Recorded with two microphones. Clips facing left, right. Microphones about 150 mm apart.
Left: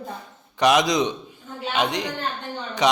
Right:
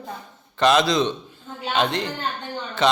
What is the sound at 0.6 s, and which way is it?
A man's voice, 15° left (ahead or behind).